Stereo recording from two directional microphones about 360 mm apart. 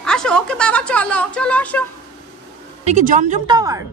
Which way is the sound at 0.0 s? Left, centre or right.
Centre.